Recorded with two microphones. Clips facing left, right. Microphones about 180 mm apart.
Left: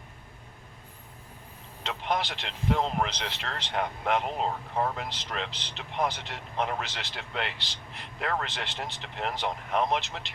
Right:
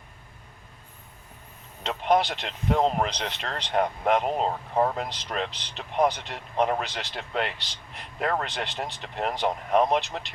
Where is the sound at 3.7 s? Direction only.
45° right (ahead or behind).